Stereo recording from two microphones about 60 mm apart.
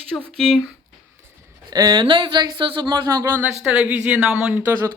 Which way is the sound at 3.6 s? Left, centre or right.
Centre.